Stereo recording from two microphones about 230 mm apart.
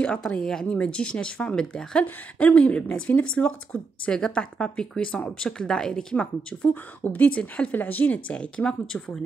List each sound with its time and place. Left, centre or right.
0.0 s speech: centre